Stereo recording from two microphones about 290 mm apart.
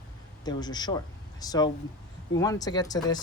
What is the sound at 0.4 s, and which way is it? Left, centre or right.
A woman's voice, centre.